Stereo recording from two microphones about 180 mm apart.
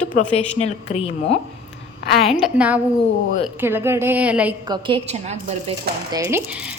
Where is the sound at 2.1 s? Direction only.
Centre (ahead or behind).